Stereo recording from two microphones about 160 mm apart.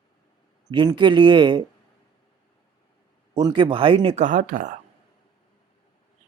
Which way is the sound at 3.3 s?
30° right (ahead or behind).